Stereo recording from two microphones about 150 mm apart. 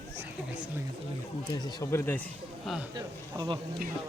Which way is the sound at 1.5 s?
25° left (ahead or behind).